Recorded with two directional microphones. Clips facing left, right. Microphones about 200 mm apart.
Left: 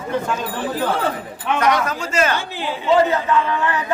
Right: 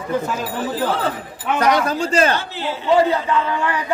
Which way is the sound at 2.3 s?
15° left (ahead or behind).